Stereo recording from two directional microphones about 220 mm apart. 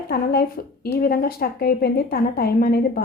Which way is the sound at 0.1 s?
45° left (ahead or behind).